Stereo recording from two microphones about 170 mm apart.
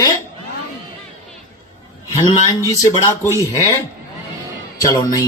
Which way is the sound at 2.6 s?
20° left (ahead or behind).